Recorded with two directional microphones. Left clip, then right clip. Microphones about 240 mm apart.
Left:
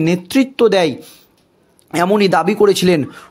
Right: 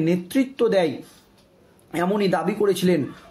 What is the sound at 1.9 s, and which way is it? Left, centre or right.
Speech, left.